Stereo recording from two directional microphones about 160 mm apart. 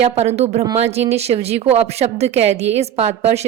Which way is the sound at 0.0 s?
40° right (ahead or behind).